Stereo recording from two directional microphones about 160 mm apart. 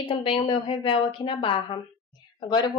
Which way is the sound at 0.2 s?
30° left (ahead or behind).